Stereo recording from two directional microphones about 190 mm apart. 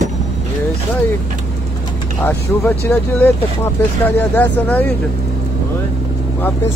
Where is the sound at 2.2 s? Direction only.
10° left (ahead or behind).